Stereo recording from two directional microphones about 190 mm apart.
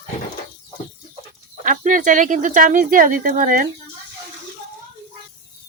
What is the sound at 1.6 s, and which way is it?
Speech, 45° right (ahead or behind).